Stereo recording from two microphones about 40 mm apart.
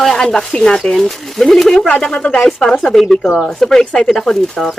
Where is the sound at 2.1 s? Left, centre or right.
Left.